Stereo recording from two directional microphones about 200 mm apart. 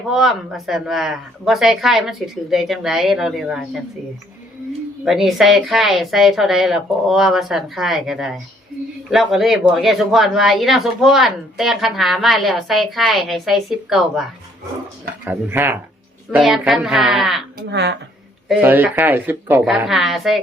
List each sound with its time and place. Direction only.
0.1 s speech: centre (ahead or behind)
5.0 s a woman's voice: centre (ahead or behind)
17.7 s speech: 55° right (ahead or behind)
18.4 s a woman's voice: 10° right (ahead or behind)